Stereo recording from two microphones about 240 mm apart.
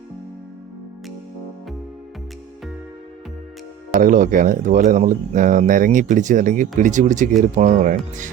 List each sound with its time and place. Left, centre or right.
3.9 s speech: right